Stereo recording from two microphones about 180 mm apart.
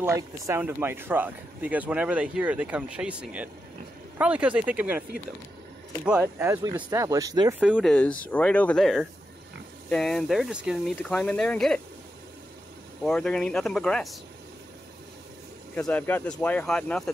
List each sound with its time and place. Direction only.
0.0 s speech: 15° right (ahead or behind)
6.0 s speech: 10° right (ahead or behind)
7.6 s speech: 5° right (ahead or behind)
7.9 s speech: 5° left (ahead or behind)
11.0 s speech: 5° left (ahead or behind)
13.0 s speech: 5° left (ahead or behind)
15.7 s speech: 10° left (ahead or behind)